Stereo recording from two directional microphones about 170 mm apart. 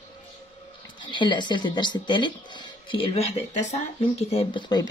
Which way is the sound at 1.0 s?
30° left (ahead or behind).